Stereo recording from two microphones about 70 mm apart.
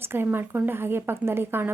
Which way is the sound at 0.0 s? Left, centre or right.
Right.